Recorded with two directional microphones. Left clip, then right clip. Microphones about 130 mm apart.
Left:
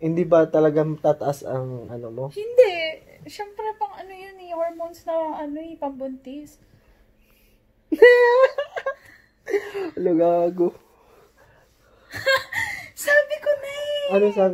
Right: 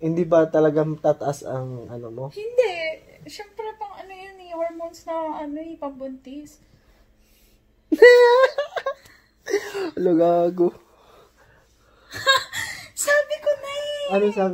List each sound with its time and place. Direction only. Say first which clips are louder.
0.0 s speech: left 1 dB; centre (ahead or behind)
2.3 s speech: left 5 dB; 55° left (ahead or behind); by 6.5 s 25° left (ahead or behind)
7.9 s speech: right 2 dB; 35° right (ahead or behind)
12.1 s a sound: right 1 dB; 5° left (ahead or behind)
13.3 s wail: even; 25° left (ahead or behind)